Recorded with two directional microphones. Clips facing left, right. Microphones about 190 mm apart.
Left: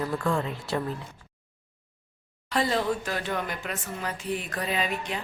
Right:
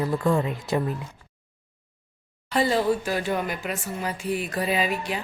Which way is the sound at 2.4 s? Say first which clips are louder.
Right 4 dB; 5° right (ahead or behind).